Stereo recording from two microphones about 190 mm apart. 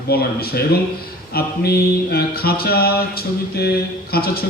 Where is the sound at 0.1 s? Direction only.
55° left (ahead or behind).